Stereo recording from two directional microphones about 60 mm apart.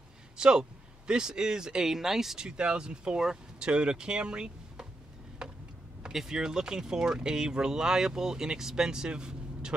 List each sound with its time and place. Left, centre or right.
0.4 s speech: centre
5.4 s vehicle: centre
6.0 s speech: centre